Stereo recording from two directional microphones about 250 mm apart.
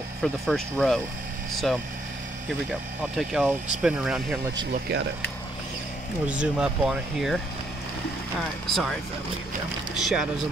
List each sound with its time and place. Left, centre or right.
0.2 s speech: centre
3.0 s speech: centre
4.7 s speech: right
6.2 s speech: centre
8.6 s speech: centre
9.9 s speech: centre